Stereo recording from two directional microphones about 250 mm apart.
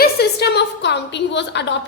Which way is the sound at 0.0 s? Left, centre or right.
Left.